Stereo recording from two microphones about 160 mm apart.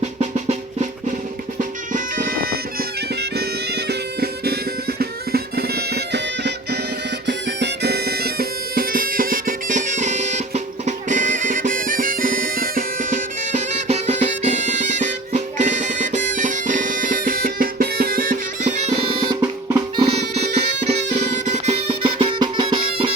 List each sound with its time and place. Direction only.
0.2 s drum: 45° right (ahead or behind)
1.9 s music: 60° right (ahead or behind)
3.2 s bagpipes: 90° right
7.3 s music: 90° right; by 18.7 s 65° right (ahead or behind)
18.8 s bagpipes: 40° right (ahead or behind)
19.4 s drum: 20° right (ahead or behind)
20.0 s music: 40° right (ahead or behind)